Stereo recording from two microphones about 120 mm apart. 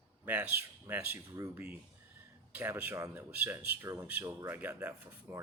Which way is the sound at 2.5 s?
15° right (ahead or behind).